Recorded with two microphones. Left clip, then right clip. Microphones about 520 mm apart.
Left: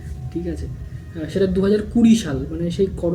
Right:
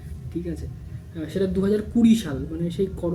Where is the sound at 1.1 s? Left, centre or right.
Right.